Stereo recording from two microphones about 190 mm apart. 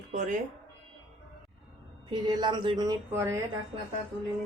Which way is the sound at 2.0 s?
25° right (ahead or behind).